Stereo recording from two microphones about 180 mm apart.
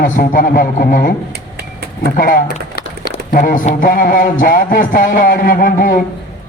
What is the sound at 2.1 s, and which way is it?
A man's voice, 55° left (ahead or behind).